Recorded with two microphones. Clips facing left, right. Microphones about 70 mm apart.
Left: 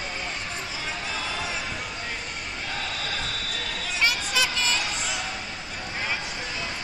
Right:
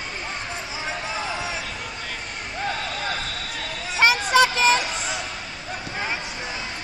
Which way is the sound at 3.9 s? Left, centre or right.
Right.